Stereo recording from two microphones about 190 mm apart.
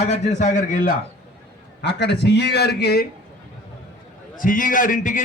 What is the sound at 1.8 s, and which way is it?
A man's voice, 65° left (ahead or behind).